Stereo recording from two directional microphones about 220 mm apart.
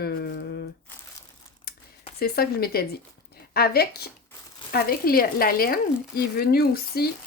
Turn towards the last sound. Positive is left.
turn(degrees=45)  # may be behind; listen again after turning